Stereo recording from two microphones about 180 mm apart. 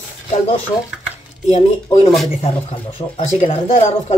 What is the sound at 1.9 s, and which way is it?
Speech, 30° left (ahead or behind).